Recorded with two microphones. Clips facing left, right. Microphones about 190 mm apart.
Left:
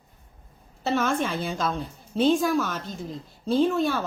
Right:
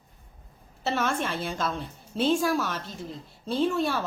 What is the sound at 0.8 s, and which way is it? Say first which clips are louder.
A woman's voice: left 3 dB; centre (ahead or behind).